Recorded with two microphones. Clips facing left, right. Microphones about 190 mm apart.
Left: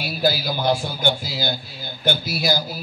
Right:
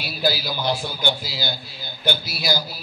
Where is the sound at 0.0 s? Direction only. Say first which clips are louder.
Left 2 dB; 50° left (ahead or behind).